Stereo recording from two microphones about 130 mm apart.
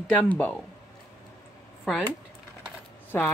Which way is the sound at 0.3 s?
10° left (ahead or behind).